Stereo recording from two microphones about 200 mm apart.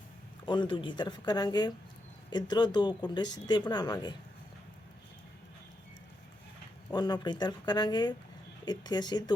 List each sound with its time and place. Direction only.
0.4 s speech: 25° left (ahead or behind)
6.9 s speech: 20° left (ahead or behind)